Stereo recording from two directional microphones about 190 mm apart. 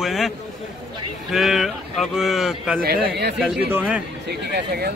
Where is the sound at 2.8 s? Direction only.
55° right (ahead or behind).